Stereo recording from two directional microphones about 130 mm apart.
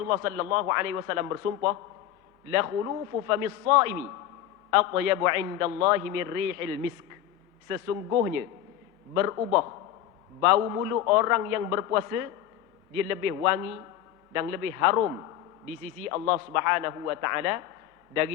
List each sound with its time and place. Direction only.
0.1 s a man's voice: 20° right (ahead or behind)
7.7 s a man's voice: 25° right (ahead or behind)
13.1 s a man's voice: 20° right (ahead or behind)